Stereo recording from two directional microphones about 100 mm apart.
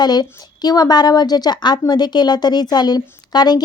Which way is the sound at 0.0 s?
45° left (ahead or behind).